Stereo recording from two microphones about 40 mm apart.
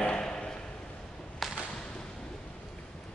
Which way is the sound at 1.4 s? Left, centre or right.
Centre.